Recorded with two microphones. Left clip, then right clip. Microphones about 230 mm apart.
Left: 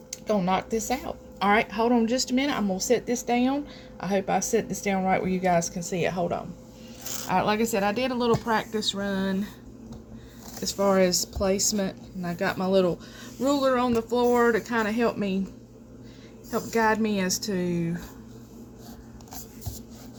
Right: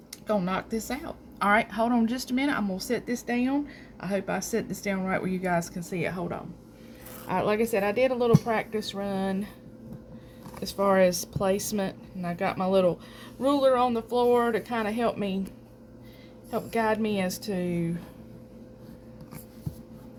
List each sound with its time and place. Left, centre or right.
0.3 s a woman's voice: centre; by 9.5 s right
10.8 s speech: right
16.5 s speech: right